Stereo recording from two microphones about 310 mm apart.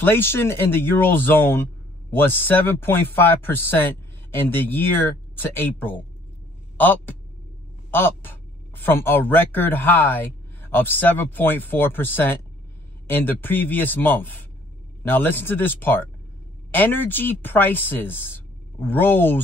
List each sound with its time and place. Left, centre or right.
0.0 s a man's voice: centre